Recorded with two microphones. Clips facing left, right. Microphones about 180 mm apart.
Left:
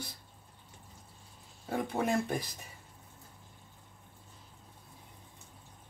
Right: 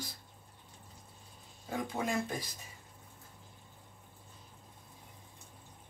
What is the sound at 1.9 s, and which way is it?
Speech, 60° left (ahead or behind).